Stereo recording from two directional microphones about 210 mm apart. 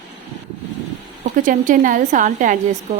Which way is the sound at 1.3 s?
40° right (ahead or behind).